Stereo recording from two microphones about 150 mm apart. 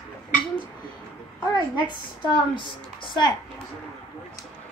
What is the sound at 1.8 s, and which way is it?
A woman's voice, 35° left (ahead or behind).